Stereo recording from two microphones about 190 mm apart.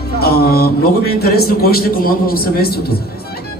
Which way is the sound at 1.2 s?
55° left (ahead or behind).